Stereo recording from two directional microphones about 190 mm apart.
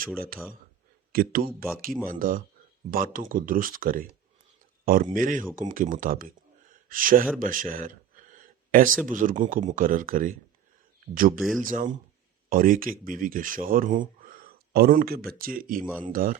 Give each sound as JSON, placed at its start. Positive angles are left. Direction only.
{"t": 1.1, "sound": "speech", "side_deg": -50}
{"t": 5.1, "sound": "speech", "side_deg": -45}
{"t": 7.3, "sound": "a sound", "side_deg": -45}
{"t": 9.0, "sound": "speech", "side_deg": -45}
{"t": 11.3, "sound": "speech", "side_deg": 0}
{"t": 11.7, "sound": "speech", "side_deg": -45}